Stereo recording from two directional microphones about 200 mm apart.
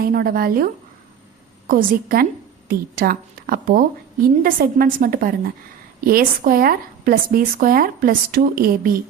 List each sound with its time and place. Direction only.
0.0 s a woman's voice: 50° right (ahead or behind)